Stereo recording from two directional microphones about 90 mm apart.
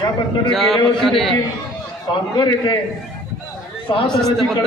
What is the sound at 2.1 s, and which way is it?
Speech, 55° left (ahead or behind).